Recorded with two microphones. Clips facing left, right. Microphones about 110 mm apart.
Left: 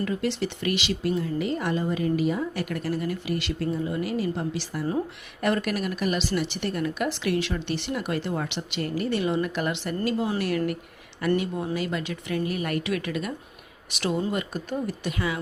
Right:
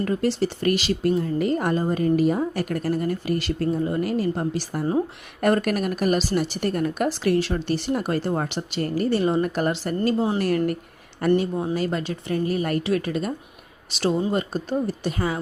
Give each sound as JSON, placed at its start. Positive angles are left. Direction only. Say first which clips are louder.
{"t": 0.0, "sound": "a woman's voice", "louder": "right 4 dB", "side_deg": -40}